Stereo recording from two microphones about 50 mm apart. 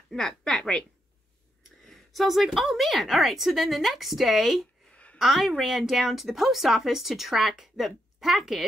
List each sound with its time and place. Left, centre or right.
0.1 s speech: centre
1.9 s speech: centre
4.9 s a sound: left
5.2 s speech: centre